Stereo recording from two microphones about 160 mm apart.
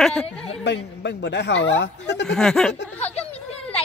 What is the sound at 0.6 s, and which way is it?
Speech, 90° left.